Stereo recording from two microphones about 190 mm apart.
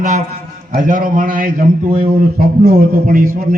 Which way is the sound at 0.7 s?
45° right (ahead or behind).